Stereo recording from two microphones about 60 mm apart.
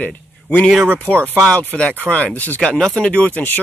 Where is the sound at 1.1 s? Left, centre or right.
Right.